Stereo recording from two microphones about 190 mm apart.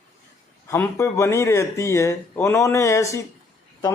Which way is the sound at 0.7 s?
15° left (ahead or behind).